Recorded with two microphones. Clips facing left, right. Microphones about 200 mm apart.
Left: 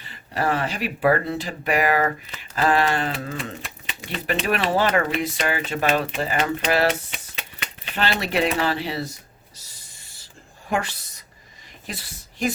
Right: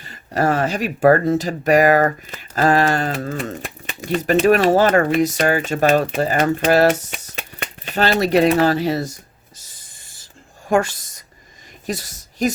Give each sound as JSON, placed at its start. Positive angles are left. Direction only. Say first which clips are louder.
{"t": 0.0, "sound": "speech", "louder": "right 6 dB", "side_deg": -45}
{"t": 10.7, "sound": "a woman's voice", "louder": "right 8 dB", "side_deg": -45}